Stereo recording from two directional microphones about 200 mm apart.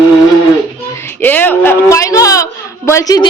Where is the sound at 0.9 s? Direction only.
10° left (ahead or behind).